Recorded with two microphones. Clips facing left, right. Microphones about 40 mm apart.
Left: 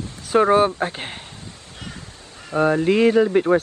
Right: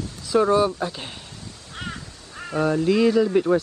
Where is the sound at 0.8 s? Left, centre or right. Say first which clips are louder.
Left 3 dB; left.